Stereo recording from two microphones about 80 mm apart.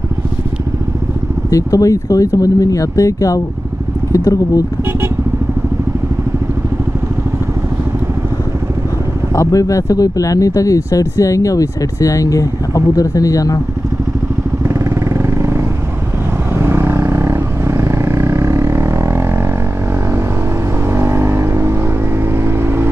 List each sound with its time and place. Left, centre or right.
1.5 s speech: left
9.3 s speech: left
14.6 s motorcycle: right
16.5 s vehicle: right
20.9 s vehicle: right